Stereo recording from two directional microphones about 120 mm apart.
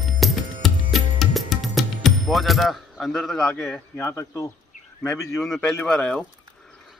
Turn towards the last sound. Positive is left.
turn(degrees=10)  # may be behind; listen again after turning